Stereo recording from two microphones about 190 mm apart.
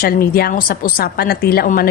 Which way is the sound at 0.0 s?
50° left (ahead or behind).